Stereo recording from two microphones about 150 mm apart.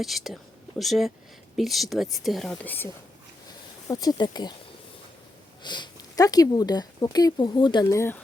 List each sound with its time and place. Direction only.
0.0 s speech: centre (ahead or behind)
2.6 s speech: 15° left (ahead or behind)
3.8 s speech: 25° left (ahead or behind)
5.6 s speech: 30° left (ahead or behind)